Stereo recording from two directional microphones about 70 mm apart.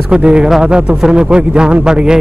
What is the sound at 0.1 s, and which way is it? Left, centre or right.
A man's voice, centre.